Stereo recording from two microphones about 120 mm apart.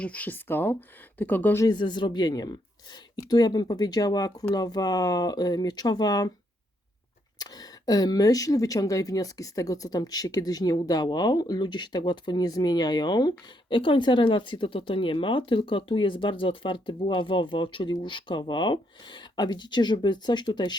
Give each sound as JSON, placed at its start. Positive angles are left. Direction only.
{"t": 0.0, "sound": "speech", "side_deg": 10}
{"t": 1.6, "sound": "speech", "side_deg": 40}
{"t": 7.3, "sound": "speech", "side_deg": 35}